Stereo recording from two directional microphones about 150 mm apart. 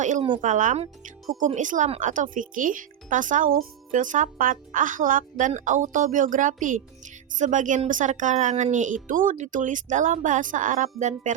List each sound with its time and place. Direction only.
0.4 s speech: 55° right (ahead or behind)